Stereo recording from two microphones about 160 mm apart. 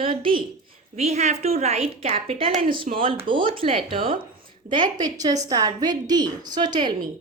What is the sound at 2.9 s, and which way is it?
Speech, 50° right (ahead or behind).